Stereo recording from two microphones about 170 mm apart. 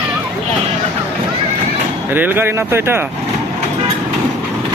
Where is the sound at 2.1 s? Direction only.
10° right (ahead or behind).